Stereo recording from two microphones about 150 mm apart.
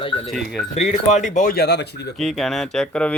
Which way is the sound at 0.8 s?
50° left (ahead or behind).